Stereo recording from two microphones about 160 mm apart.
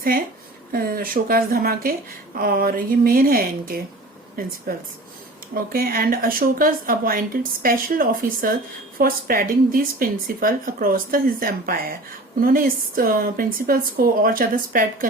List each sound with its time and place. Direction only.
0.7 s speech: 65° right (ahead or behind)
5.5 s speech: 65° right (ahead or behind)